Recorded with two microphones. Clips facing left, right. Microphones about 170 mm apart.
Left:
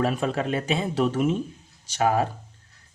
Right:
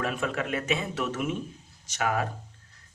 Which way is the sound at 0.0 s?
35° left (ahead or behind).